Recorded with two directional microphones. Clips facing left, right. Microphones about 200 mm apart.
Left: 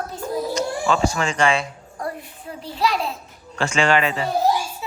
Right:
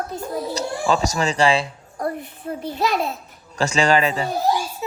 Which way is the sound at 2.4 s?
45° right (ahead or behind).